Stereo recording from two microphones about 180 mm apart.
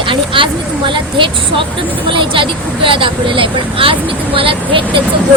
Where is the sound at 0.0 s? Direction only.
30° right (ahead or behind).